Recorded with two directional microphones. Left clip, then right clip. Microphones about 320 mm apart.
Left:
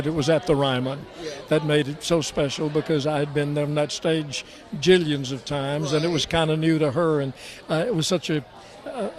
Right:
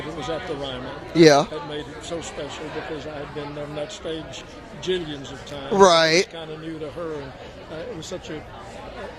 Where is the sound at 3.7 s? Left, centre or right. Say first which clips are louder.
Left 7 dB; left.